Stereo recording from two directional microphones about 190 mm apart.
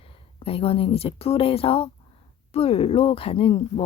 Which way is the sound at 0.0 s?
30° left (ahead or behind).